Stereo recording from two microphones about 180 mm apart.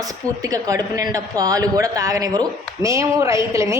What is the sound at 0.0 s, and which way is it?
A woman's voice, 20° right (ahead or behind).